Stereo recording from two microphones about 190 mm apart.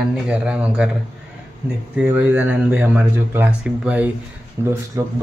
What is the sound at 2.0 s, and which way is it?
Speech, 10° right (ahead or behind).